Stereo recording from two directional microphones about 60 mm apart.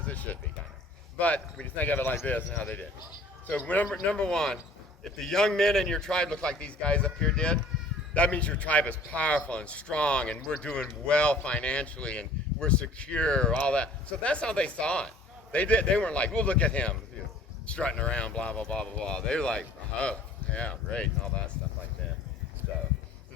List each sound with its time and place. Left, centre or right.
0.0 s a sound: left
1.2 s speech: left
4.1 s speech: centre